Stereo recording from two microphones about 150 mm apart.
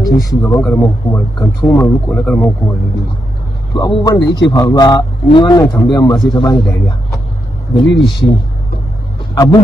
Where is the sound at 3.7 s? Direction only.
25° left (ahead or behind).